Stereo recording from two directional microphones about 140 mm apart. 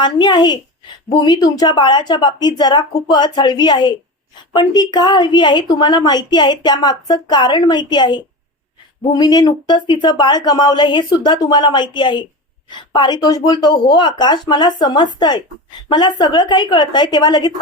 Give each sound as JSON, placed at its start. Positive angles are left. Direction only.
{"t": 0.0, "sound": "a woman's voice", "side_deg": 30}